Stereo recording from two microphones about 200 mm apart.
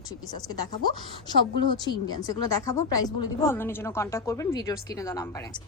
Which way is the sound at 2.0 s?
20° left (ahead or behind).